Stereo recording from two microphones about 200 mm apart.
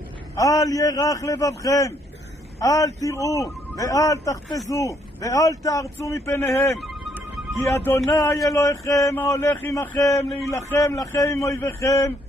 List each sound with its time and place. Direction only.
0.4 s a man's voice: 15° left (ahead or behind)